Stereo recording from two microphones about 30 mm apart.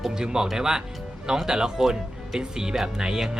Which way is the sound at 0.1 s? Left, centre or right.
Right.